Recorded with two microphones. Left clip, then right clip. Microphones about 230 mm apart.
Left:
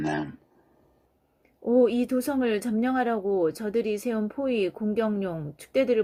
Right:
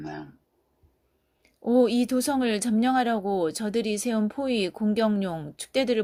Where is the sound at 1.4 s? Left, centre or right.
Right.